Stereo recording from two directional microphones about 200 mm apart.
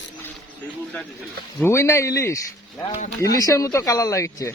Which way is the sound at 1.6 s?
15° left (ahead or behind).